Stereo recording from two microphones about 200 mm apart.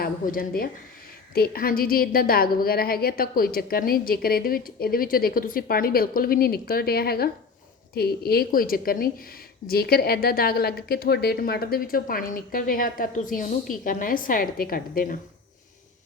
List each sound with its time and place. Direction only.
0.0 s a woman's voice: 45° left (ahead or behind)